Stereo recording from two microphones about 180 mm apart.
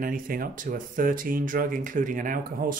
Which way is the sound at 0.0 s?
50° right (ahead or behind).